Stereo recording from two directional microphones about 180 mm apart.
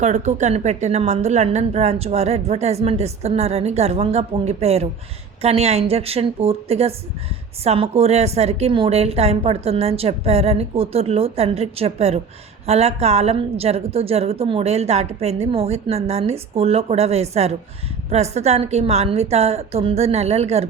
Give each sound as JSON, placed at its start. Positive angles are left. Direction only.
{"t": 0.0, "sound": "a woman's voice", "side_deg": -40}